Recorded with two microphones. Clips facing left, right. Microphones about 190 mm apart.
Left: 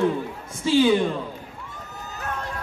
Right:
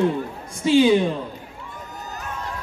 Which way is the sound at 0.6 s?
15° right (ahead or behind).